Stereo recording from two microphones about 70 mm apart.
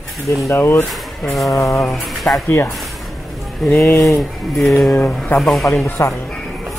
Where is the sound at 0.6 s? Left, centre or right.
Left.